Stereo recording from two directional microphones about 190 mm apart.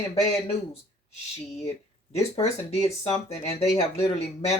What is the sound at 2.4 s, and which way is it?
Speech, 35° left (ahead or behind).